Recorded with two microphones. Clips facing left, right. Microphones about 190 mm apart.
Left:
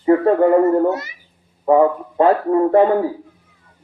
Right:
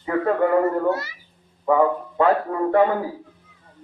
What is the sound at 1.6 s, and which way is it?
A man's voice, 30° left (ahead or behind).